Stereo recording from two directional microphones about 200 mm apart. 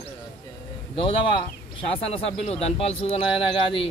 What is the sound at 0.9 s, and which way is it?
Speech, 25° left (ahead or behind).